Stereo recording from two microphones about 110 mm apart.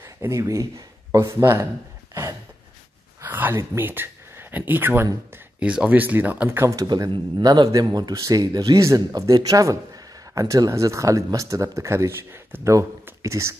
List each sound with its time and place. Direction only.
0.0 s speech: 25° right (ahead or behind)
3.2 s speech: 15° right (ahead or behind)
6.6 s speech: 30° right (ahead or behind)